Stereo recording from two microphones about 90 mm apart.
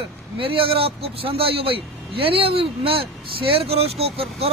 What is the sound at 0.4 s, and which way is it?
Speech, 90° right.